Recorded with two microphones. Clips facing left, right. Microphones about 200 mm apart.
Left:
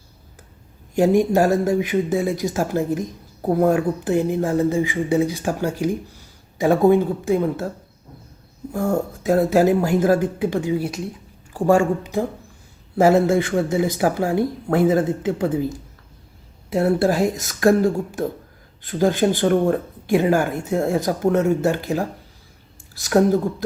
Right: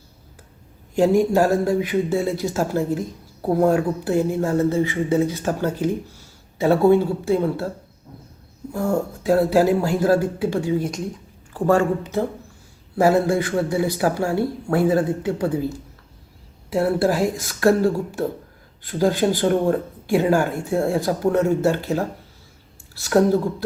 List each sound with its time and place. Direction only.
0.9 s speech: 20° left (ahead or behind)
8.8 s speech: 20° left (ahead or behind)
16.6 s speech: 20° left (ahead or behind)
23.0 s speech: 15° left (ahead or behind)